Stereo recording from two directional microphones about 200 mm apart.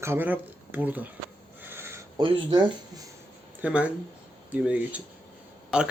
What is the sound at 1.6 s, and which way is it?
Owl, 10° right (ahead or behind).